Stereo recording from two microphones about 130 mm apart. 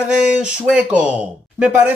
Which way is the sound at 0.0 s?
5° right (ahead or behind).